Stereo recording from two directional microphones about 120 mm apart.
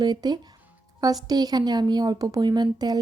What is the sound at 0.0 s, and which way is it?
A woman's voice, 35° right (ahead or behind).